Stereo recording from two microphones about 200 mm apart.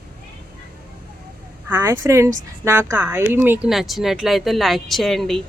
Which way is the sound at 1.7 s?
15° right (ahead or behind).